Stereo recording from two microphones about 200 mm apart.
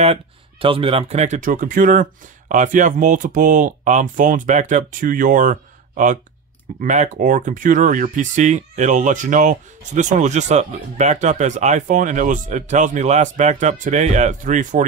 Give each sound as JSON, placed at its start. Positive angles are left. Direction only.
{"t": 0.0, "sound": "speech", "side_deg": -30}